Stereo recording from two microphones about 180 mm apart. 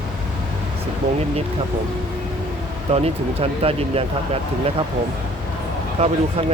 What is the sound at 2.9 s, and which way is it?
Speech, 35° right (ahead or behind).